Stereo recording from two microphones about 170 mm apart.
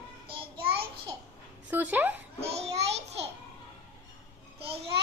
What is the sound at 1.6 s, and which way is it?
Speech, 10° right (ahead or behind).